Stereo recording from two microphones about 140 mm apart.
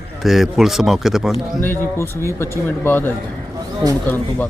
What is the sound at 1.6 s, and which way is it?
Speech, 15° left (ahead or behind).